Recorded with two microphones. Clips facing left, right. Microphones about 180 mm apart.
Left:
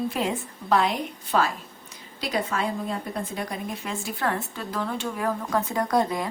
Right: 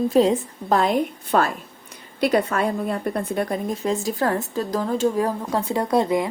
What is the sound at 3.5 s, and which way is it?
Speech, 40° right (ahead or behind).